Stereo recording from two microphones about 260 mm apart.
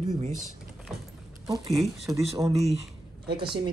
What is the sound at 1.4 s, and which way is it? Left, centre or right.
Speech, centre.